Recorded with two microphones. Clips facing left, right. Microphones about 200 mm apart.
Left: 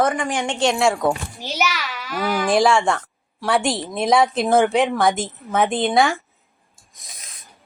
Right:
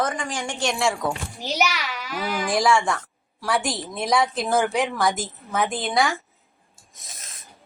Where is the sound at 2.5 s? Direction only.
25° left (ahead or behind).